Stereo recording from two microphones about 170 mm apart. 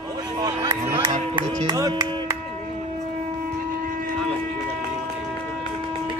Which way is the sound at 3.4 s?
55° right (ahead or behind).